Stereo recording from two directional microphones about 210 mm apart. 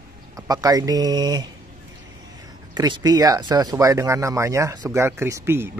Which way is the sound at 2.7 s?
20° right (ahead or behind).